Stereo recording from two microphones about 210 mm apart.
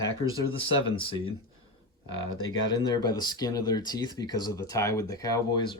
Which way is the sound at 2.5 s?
20° left (ahead or behind).